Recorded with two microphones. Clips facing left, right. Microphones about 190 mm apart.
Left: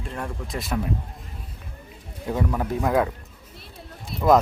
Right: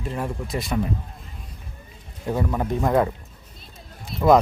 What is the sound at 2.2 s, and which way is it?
Speech, 5° right (ahead or behind).